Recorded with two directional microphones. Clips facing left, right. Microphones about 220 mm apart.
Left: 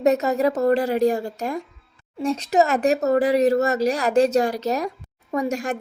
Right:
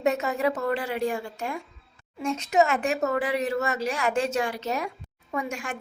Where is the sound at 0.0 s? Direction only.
40° left (ahead or behind).